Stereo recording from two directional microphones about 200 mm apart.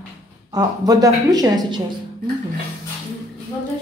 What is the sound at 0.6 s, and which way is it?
A woman's voice, 20° right (ahead or behind).